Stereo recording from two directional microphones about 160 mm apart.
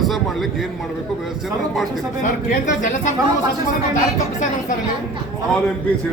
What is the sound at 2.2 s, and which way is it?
Speech, 55° left (ahead or behind).